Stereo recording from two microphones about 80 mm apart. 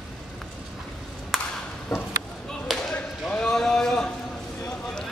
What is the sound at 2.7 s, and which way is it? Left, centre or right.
Basketball bounce, centre.